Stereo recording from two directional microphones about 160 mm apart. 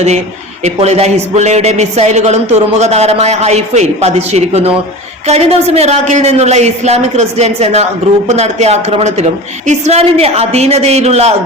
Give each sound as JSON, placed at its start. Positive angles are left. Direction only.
{"t": 0.6, "sound": "a woman's voice", "side_deg": -40}